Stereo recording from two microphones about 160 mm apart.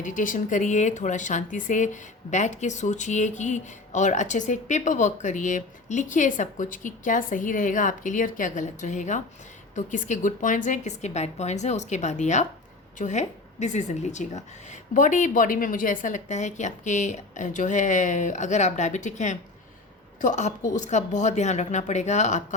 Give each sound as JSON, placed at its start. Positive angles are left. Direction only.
{"t": 0.0, "sound": "speech", "side_deg": 55}